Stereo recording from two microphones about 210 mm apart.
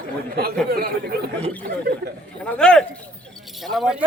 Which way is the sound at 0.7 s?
45° right (ahead or behind).